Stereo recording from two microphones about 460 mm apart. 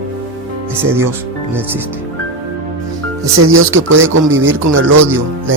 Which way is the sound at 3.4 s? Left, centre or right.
Right.